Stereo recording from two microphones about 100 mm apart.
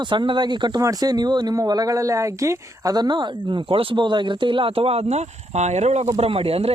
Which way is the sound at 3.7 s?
60° right (ahead or behind).